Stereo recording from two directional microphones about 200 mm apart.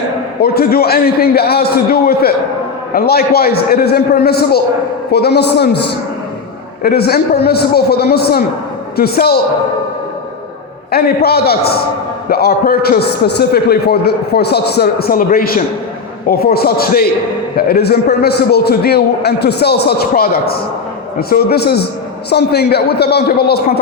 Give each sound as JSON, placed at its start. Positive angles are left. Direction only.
{"t": 0.4, "sound": "a man's voice", "side_deg": 50}
{"t": 10.9, "sound": "a man's voice", "side_deg": 50}